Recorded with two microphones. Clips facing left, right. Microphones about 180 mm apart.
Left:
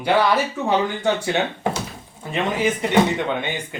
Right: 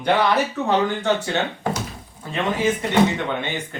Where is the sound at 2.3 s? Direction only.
15° left (ahead or behind).